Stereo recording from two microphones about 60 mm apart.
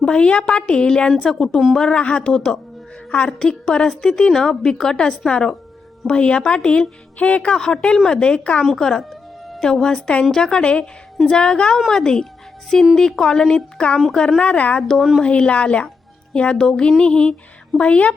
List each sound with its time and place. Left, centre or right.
0.0 s a woman's voice: centre
1.9 s a woman's voice: left
8.7 s music: centre
9.6 s a woman's voice: centre
14.8 s a woman's voice: centre